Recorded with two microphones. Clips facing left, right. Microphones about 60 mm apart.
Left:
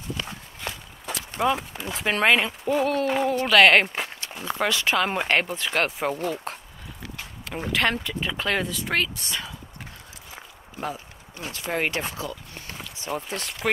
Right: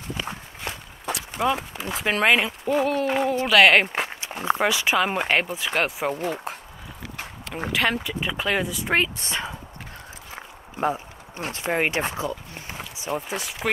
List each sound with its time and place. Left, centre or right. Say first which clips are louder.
0.2 s walk: right 5 dB; centre
1.4 s speech: even; centre
3.9 s walk: right 3 dB; centre
4.3 s a sound: right 7 dB; right
4.6 s speech: left 1 dB; centre
7.7 s speech: even; centre; by 9.6 s right
10.3 s walk: right 3 dB; right
11.5 s speech: right 3 dB; right; by 13.7 s centre